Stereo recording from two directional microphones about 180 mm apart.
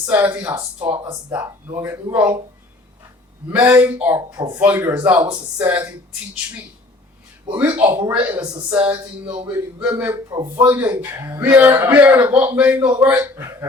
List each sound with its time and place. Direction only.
0.0 s a man's voice: 10° right (ahead or behind)
0.9 s speech: 30° right (ahead or behind)
1.3 s a man's voice: 10° right (ahead or behind)
3.5 s a man's voice: 10° right (ahead or behind)
4.4 s speech: 25° right (ahead or behind)
4.6 s a man's voice: 10° right (ahead or behind)
7.5 s a man's voice: 10° right (ahead or behind)
10.2 s speech: 20° right (ahead or behind)
10.5 s a man's voice: 10° right (ahead or behind)